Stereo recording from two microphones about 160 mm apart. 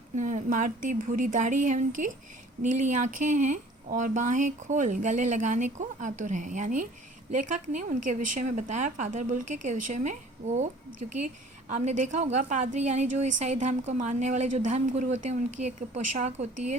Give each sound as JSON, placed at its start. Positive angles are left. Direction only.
{"t": 0.2, "sound": "speech", "side_deg": -50}
{"t": 11.7, "sound": "speech", "side_deg": -50}